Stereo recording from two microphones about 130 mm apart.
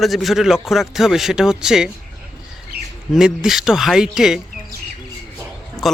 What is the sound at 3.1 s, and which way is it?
Speech, 5° right (ahead or behind).